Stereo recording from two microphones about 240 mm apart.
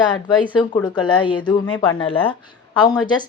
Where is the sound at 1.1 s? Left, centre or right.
Centre.